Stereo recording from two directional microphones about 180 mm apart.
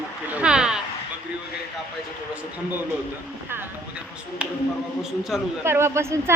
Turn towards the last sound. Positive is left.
turn(degrees=-15)  # may be behind; listen again after turning